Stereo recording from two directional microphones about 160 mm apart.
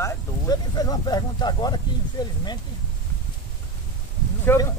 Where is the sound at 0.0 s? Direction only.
20° left (ahead or behind).